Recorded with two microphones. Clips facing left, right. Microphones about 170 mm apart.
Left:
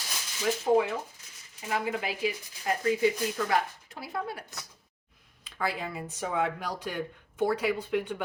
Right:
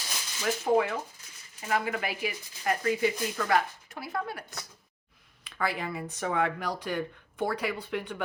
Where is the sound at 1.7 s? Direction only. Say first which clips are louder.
Right 1 dB; 20° left (ahead or behind).